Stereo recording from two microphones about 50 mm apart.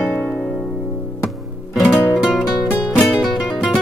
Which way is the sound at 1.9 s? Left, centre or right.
Left.